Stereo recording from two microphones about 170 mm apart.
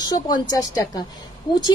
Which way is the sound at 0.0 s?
25° left (ahead or behind).